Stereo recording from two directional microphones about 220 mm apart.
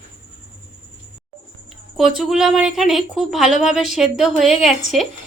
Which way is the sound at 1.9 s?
Centre (ahead or behind).